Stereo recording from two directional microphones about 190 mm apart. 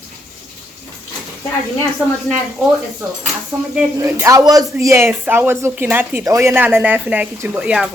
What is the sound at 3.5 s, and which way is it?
Speech, 15° right (ahead or behind).